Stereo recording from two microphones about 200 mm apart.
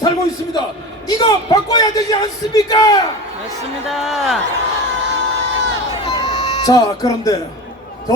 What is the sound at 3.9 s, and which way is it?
Speech, centre (ahead or behind).